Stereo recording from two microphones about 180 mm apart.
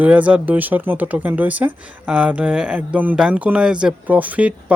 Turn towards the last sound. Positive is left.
turn(degrees=-5)  # may be behind; listen again after turning